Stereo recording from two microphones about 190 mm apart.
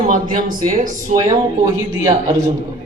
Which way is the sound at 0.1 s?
45° right (ahead or behind).